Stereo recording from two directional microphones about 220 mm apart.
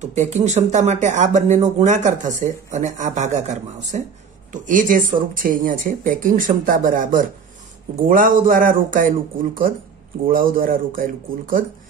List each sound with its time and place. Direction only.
0.0 s speech: 30° right (ahead or behind)